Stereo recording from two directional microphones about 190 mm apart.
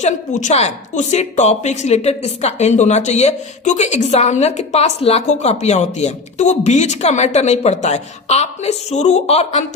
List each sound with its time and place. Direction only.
0.0 s a woman's voice: 40° left (ahead or behind)